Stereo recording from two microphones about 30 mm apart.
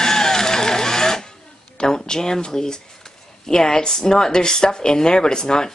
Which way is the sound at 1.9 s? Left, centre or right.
Left.